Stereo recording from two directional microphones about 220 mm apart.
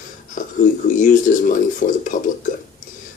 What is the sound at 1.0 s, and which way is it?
Speech, 35° left (ahead or behind).